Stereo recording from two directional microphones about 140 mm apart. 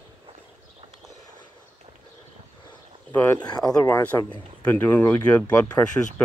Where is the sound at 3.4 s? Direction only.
30° left (ahead or behind).